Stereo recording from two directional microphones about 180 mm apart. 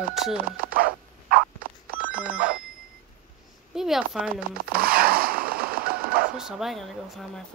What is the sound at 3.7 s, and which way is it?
Speech, centre (ahead or behind).